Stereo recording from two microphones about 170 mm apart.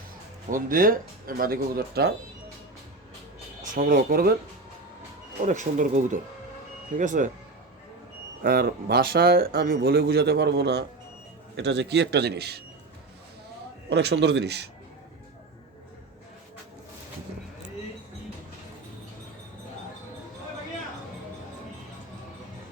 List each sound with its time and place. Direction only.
0.5 s speech: 55° right (ahead or behind)
3.8 s speech: 55° right (ahead or behind)
5.5 s speech: 45° right (ahead or behind)
8.4 s speech: 60° right (ahead or behind)
11.5 s a man's voice: 90° right; by 12.6 s 75° right (ahead or behind)
13.9 s a man's voice: 85° right